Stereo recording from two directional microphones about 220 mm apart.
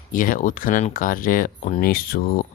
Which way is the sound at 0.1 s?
40° left (ahead or behind).